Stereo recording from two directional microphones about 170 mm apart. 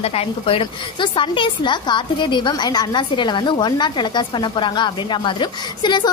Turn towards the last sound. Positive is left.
turn(degrees=25)  # may be behind; listen again after turning